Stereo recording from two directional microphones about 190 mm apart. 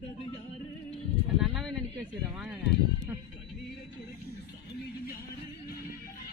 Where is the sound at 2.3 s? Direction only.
5° right (ahead or behind).